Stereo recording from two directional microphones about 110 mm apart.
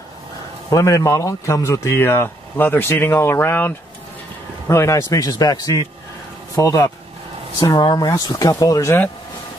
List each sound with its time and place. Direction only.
0.7 s a man's voice: 30° left (ahead or behind)